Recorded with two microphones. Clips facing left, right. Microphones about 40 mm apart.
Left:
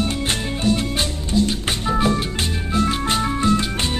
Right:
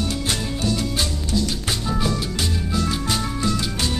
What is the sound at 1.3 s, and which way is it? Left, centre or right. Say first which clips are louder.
Music: left 6 dB; left.